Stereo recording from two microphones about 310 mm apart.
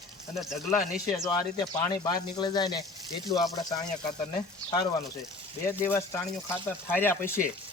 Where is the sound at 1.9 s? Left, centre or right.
Centre.